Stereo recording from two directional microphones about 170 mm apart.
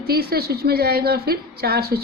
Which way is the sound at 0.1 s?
65° right (ahead or behind).